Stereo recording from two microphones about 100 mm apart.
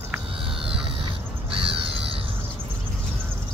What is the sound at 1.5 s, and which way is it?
Crow, 65° right (ahead or behind).